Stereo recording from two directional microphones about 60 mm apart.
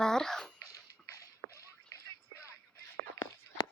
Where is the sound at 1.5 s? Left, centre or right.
Right.